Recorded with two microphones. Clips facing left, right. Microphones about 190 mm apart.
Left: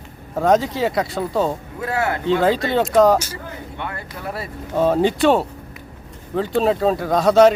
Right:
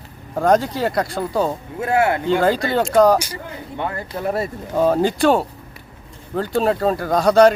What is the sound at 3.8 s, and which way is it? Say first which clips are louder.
Speech: right 7 dB; 30° right (ahead or behind).